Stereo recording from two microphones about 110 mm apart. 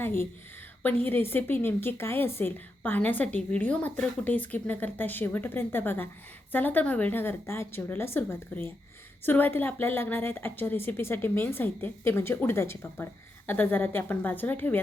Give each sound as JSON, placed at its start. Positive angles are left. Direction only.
{"t": 0.0, "sound": "a woman's voice", "side_deg": 20}